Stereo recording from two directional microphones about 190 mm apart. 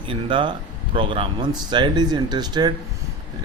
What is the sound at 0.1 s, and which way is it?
Speech, 25° right (ahead or behind).